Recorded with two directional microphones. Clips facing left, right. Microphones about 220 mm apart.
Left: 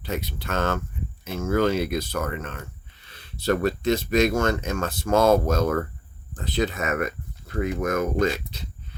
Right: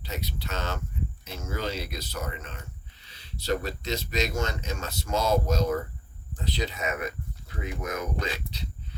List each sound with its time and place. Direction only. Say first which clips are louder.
0.0 s speech: left 6 dB; 50° left (ahead or behind)